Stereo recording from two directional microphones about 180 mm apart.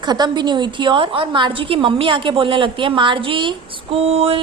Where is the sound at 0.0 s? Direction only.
25° right (ahead or behind).